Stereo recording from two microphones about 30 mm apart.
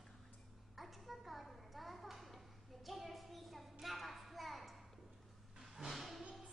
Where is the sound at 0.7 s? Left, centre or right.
Centre.